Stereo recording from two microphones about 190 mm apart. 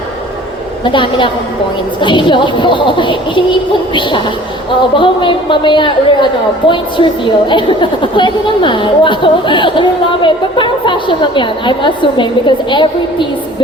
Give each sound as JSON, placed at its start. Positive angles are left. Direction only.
{"t": 0.9, "sound": "a woman's voice", "side_deg": 25}